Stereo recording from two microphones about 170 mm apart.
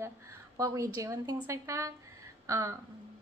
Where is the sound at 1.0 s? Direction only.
15° right (ahead or behind).